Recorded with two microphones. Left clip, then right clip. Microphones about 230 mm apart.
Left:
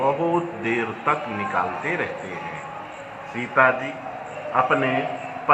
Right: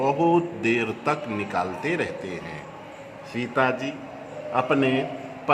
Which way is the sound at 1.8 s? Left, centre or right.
Right.